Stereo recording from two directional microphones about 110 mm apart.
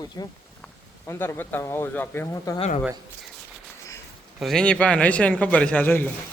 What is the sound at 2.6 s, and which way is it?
Speech, 70° left (ahead or behind).